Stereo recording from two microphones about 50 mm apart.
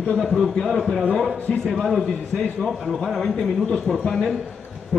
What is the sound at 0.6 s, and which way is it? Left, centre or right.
A man's voice, centre.